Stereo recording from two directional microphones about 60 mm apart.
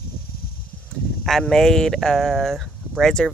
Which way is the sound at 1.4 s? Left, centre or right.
Centre.